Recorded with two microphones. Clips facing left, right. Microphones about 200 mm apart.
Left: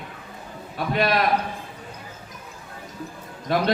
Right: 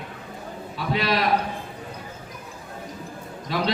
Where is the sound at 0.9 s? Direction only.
50° left (ahead or behind).